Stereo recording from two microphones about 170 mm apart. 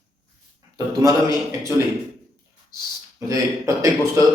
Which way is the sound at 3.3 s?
20° right (ahead or behind).